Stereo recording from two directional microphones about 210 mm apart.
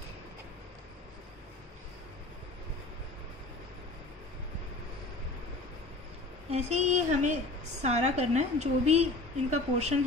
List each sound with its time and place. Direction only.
6.5 s a woman's voice: 30° right (ahead or behind)